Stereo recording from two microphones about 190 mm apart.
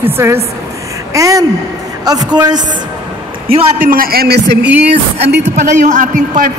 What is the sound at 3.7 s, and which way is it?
Speech, 45° right (ahead or behind).